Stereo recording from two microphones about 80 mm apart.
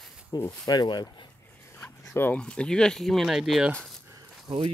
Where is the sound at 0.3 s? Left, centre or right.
Left.